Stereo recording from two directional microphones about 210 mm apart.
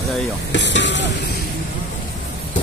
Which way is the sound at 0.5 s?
55° left (ahead or behind).